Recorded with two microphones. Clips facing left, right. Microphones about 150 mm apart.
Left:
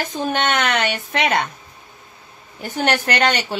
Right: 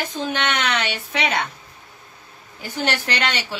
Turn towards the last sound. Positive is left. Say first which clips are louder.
# left 6 dB
turn(degrees=45)  # may be behind; listen again after turning